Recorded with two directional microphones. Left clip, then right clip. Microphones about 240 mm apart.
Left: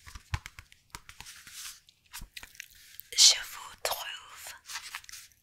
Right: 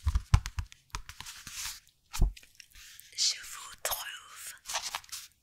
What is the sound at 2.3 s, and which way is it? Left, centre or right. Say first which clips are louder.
Chewing: left 7 dB; left.